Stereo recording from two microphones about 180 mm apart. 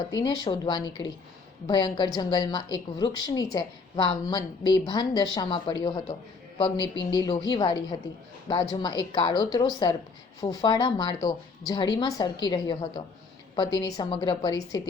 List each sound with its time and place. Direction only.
0.1 s a woman's voice: 20° left (ahead or behind)